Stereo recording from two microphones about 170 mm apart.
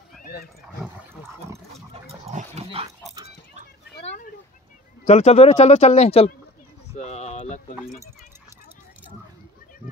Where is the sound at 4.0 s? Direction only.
40° left (ahead or behind).